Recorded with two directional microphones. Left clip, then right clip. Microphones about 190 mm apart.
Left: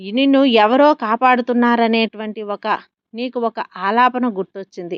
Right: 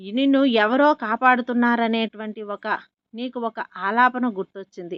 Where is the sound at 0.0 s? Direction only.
25° left (ahead or behind).